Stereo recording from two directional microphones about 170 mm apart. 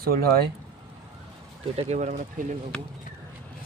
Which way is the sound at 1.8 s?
40° right (ahead or behind).